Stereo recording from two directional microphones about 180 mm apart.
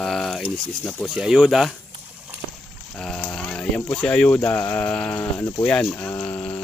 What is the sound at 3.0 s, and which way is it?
Speech, 5° left (ahead or behind).